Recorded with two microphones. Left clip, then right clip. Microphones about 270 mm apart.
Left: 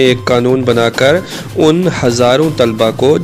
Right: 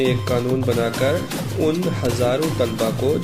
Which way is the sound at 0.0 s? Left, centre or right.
Left.